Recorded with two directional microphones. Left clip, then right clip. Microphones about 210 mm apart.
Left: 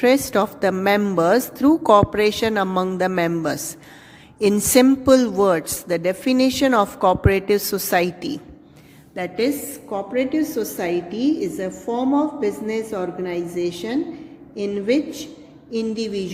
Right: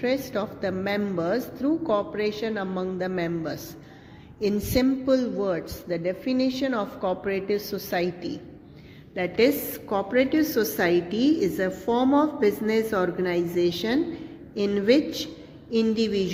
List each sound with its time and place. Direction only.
0.0 s a woman's voice: 50° left (ahead or behind)
9.4 s a woman's voice: 10° left (ahead or behind)